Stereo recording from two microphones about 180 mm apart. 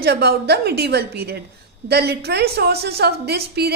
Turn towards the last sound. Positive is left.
turn(degrees=-65)  # may be behind; listen again after turning